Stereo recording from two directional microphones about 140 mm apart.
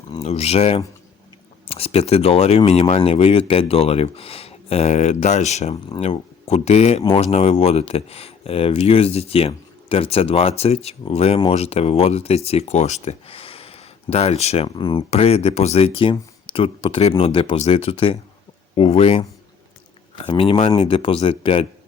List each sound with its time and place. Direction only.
0.1 s speech: 45° left (ahead or behind)
15.1 s speech: 45° left (ahead or behind)
20.2 s speech: 40° left (ahead or behind)